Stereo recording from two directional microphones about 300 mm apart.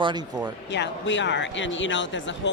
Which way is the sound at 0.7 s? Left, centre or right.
Left.